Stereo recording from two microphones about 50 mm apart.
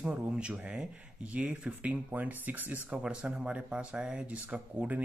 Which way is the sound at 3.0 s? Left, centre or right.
Right.